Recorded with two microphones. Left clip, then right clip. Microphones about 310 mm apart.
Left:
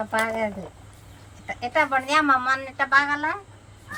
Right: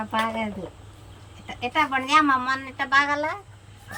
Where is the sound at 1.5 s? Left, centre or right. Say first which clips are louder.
Left 1 dB; centre.